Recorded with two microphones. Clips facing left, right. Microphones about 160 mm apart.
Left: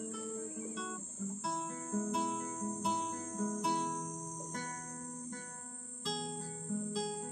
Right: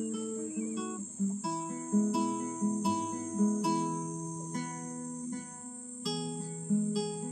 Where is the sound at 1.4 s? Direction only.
10° right (ahead or behind).